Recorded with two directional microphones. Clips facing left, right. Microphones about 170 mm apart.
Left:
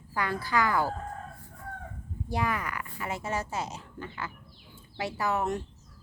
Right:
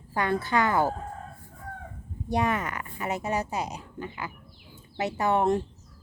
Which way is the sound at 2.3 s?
25° right (ahead or behind).